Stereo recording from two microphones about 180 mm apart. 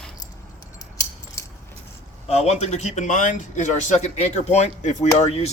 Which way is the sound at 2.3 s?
35° left (ahead or behind).